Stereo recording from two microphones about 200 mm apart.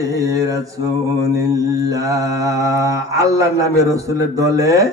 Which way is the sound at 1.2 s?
15° right (ahead or behind).